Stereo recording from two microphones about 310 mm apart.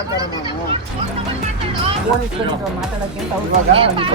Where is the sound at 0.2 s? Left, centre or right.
Centre.